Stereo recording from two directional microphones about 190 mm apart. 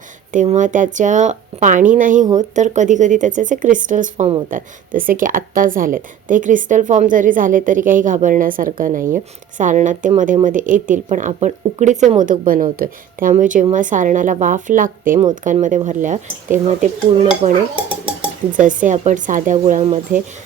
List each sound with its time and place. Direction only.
0.3 s speech: 40° right (ahead or behind)
18.0 s dishes: 5° right (ahead or behind)
18.6 s speech: 40° right (ahead or behind)